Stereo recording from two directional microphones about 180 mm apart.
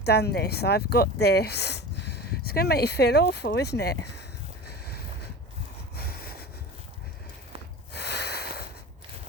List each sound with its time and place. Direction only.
0.0 s speech: 65° left (ahead or behind)
4.6 s a sound: 60° left (ahead or behind)
7.9 s snort: 65° left (ahead or behind)